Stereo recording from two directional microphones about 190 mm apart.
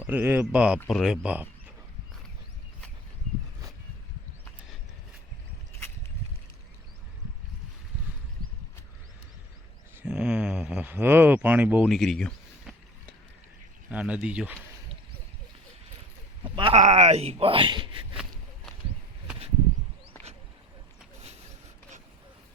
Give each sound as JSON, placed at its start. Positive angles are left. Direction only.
{"t": 0.0, "sound": "speech", "side_deg": -10}
{"t": 10.0, "sound": "speech", "side_deg": -5}
{"t": 16.6, "sound": "speech", "side_deg": -30}